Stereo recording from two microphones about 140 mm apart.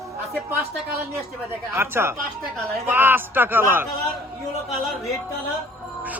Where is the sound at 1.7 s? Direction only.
15° right (ahead or behind).